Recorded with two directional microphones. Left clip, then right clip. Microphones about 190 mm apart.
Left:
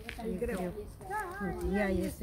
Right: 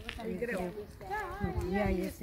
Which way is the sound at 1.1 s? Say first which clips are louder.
Left 1 dB; 40° left (ahead or behind).